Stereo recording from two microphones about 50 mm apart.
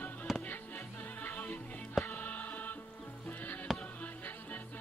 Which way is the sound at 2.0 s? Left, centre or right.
Left.